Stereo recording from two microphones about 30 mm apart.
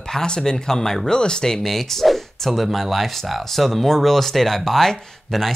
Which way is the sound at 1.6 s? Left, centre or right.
Centre.